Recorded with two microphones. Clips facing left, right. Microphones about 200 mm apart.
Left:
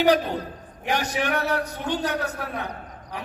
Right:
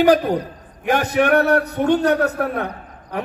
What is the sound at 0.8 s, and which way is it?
A man's voice, 55° right (ahead or behind).